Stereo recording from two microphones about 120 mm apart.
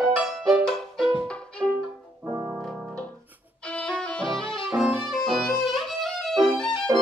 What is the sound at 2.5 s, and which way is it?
Keyboard, 5° left (ahead or behind).